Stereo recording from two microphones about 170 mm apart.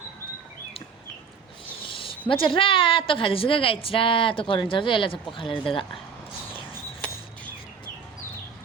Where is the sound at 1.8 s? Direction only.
30° left (ahead or behind).